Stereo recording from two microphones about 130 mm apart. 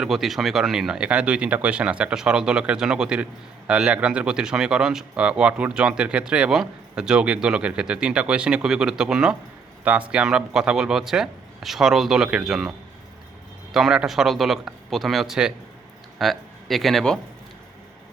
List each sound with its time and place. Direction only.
0.0 s a man's voice: centre (ahead or behind)
13.7 s a man's voice: 5° right (ahead or behind)